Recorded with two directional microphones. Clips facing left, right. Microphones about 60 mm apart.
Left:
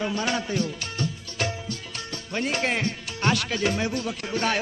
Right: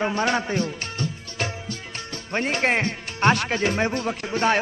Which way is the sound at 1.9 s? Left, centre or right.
Right.